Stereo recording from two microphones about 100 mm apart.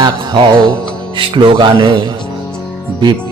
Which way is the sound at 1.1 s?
55° right (ahead or behind).